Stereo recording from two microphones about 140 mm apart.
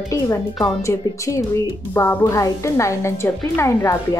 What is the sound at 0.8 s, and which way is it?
A woman's voice, 20° left (ahead or behind).